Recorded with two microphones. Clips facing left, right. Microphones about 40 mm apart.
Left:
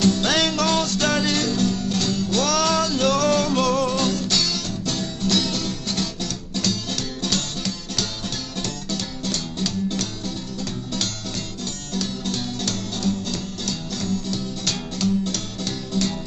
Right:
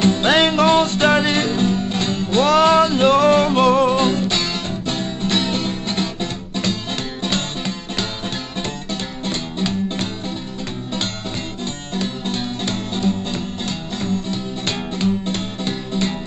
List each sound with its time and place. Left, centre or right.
0.0 s music: right
9.2 s music: right
11.6 s music: right